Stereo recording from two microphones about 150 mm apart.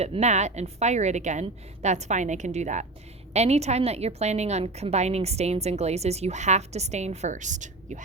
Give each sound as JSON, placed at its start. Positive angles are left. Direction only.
{"t": 0.0, "sound": "a woman's voice", "side_deg": -45}